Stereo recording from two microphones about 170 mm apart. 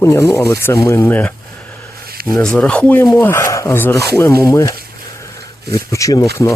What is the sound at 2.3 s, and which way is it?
Speech, 5° left (ahead or behind).